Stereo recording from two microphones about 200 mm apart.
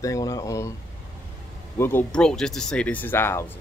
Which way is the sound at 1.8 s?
10° left (ahead or behind).